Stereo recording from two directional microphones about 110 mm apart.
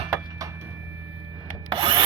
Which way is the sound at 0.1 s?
30° right (ahead or behind).